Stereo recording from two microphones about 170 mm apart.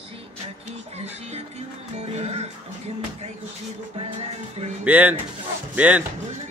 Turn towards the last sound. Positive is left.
turn(degrees=-10)  # may be behind; listen again after turning